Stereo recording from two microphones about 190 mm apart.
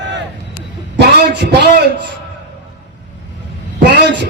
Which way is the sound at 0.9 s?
60° right (ahead or behind).